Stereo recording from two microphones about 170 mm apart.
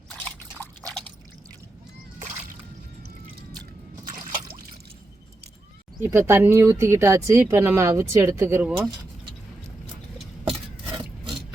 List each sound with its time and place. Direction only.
4.1 s drip: 50° right (ahead or behind)
6.0 s speech: 15° right (ahead or behind)